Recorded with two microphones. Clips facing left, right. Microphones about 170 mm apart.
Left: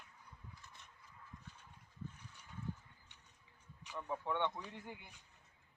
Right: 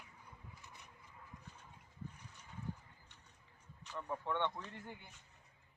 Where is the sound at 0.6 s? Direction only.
15° right (ahead or behind).